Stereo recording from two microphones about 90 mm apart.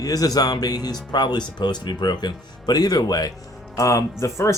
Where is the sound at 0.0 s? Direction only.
45° left (ahead or behind).